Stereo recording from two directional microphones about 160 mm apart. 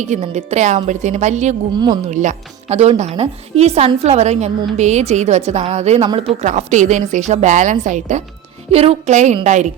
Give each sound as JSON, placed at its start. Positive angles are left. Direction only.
{"t": 0.0, "sound": "a woman's voice", "side_deg": -45}
{"t": 1.7, "sound": "speech", "side_deg": -25}
{"t": 2.0, "sound": "a woman's voice", "side_deg": -50}